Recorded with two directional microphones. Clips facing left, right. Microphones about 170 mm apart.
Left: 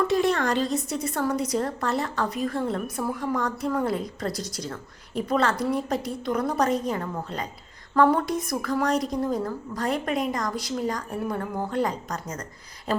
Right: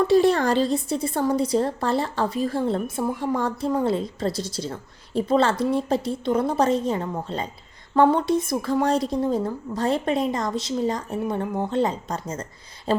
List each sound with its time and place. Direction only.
0.1 s a woman's voice: 30° right (ahead or behind)